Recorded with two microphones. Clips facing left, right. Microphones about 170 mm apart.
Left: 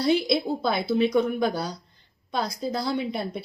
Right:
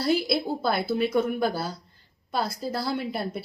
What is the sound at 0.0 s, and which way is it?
Speech, 5° right (ahead or behind).